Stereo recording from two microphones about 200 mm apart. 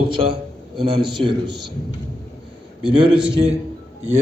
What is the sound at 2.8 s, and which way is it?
Speech, 25° right (ahead or behind).